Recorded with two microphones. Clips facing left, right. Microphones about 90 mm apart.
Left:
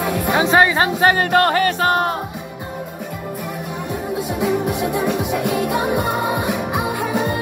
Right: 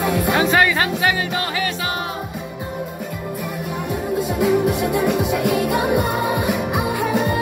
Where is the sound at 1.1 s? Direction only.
50° left (ahead or behind).